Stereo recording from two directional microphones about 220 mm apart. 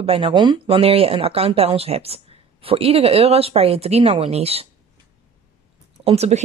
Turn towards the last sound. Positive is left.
turn(degrees=-30)  # may be behind; listen again after turning